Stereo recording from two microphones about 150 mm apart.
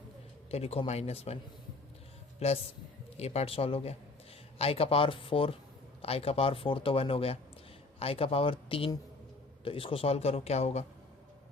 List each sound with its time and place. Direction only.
0.5 s a man's voice: 40° left (ahead or behind)
3.2 s a man's voice: 45° left (ahead or behind)